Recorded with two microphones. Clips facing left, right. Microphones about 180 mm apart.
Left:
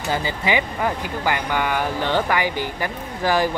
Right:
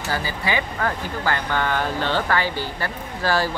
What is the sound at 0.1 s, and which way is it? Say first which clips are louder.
Speech: left 3 dB; 20° left (ahead or behind).